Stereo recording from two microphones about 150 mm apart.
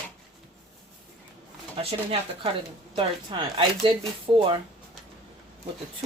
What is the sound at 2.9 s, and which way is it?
A woman's voice, 35° right (ahead or behind).